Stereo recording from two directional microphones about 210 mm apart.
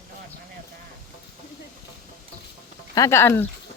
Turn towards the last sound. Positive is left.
turn(degrees=10)  # may be behind; listen again after turning